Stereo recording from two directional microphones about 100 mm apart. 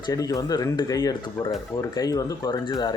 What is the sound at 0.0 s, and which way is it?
Speech, 35° left (ahead or behind).